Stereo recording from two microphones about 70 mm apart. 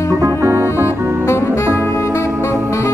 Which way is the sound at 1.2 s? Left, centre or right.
Left.